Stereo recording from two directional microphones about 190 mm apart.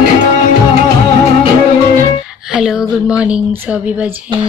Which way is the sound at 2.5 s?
5° right (ahead or behind).